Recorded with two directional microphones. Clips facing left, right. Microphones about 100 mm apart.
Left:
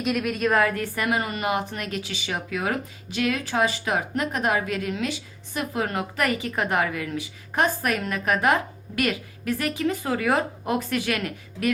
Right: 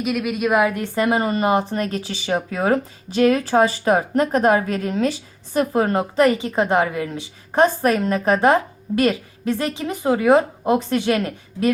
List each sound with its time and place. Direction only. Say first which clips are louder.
0.0 s a woman's voice: right 3 dB; 5° right (ahead or behind); by 11.7 s 30° right (ahead or behind)